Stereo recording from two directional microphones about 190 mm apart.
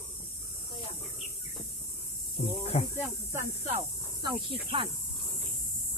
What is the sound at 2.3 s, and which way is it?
Speech, 30° left (ahead or behind).